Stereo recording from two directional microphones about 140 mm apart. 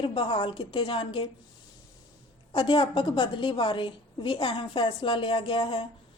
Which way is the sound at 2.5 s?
35° left (ahead or behind).